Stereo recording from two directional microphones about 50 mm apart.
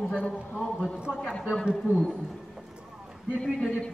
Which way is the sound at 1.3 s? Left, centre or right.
Left.